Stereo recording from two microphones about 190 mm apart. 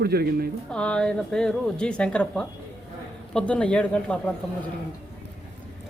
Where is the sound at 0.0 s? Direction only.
55° right (ahead or behind).